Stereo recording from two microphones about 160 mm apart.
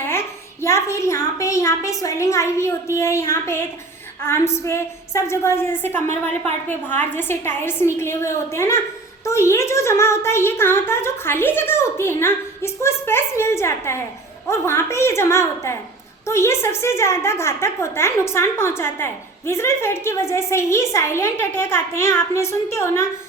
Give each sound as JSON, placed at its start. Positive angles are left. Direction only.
{"t": 0.1, "sound": "a woman's voice", "side_deg": 15}